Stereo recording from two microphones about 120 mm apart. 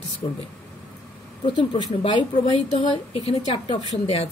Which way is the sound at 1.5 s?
40° left (ahead or behind).